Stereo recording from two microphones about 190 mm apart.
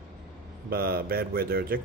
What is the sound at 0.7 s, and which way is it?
Mantra, 55° right (ahead or behind).